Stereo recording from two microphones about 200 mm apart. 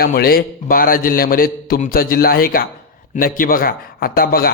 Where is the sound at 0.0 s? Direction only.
50° left (ahead or behind).